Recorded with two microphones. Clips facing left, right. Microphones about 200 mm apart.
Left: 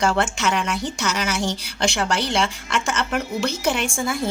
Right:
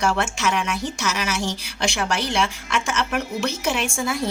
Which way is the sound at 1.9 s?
65° left (ahead or behind).